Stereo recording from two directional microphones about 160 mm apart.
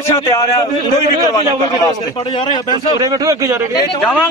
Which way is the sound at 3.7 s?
30° left (ahead or behind).